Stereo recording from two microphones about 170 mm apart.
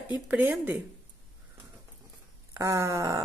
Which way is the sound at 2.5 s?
20° right (ahead or behind).